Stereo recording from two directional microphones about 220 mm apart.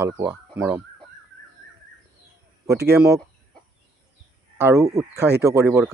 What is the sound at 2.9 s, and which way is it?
Speech, 10° right (ahead or behind).